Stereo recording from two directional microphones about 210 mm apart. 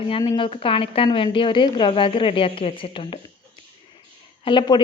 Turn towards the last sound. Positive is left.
turn(degrees=20)  # may be behind; listen again after turning